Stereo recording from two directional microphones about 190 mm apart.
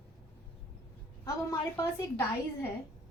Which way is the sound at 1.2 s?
15° left (ahead or behind).